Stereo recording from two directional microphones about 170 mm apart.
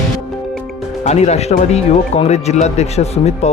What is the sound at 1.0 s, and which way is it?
Speech, 40° left (ahead or behind).